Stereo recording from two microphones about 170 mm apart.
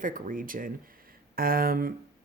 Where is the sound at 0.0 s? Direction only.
50° right (ahead or behind).